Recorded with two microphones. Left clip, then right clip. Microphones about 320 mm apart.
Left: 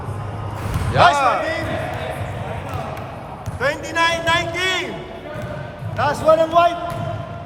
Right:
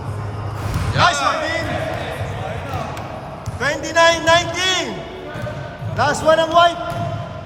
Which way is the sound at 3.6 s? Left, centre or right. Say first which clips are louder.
Right 4 dB; centre.